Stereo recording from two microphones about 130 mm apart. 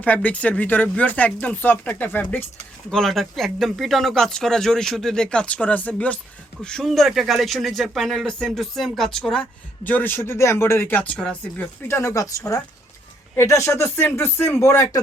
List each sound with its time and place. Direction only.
0.0 s speech: 10° left (ahead or behind)
2.9 s speech: centre (ahead or behind); by 15.0 s 25° left (ahead or behind)